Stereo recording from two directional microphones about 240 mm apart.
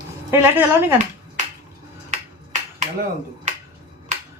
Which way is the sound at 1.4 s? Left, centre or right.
Right.